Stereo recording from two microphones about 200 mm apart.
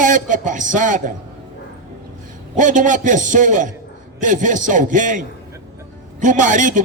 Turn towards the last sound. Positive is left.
turn(degrees=-40)  # may be behind; listen again after turning